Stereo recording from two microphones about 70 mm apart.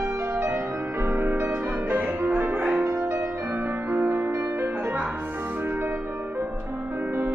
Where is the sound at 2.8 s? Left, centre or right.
Right.